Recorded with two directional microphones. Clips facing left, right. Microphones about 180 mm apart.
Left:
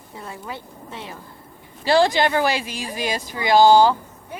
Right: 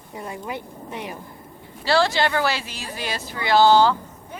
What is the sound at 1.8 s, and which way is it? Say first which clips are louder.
Speech: left 3 dB; 15° left (ahead or behind).